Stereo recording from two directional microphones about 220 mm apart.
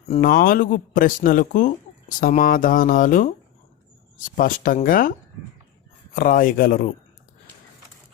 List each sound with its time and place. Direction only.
0.2 s a man's voice: 40° left (ahead or behind)
6.1 s a man's voice: 40° left (ahead or behind)